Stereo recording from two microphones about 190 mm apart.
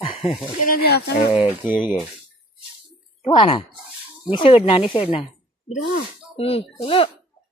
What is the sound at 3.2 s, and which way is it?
Speech, 25° left (ahead or behind).